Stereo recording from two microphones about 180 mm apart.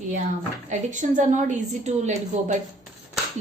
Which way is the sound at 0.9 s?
45° right (ahead or behind).